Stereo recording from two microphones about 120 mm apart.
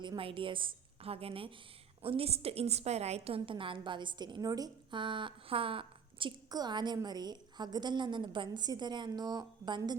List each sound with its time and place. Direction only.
0.2 s a woman's voice: 50° right (ahead or behind)